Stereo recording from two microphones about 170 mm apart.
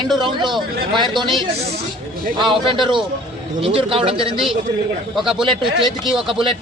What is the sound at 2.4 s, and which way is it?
A man's voice, 30° right (ahead or behind).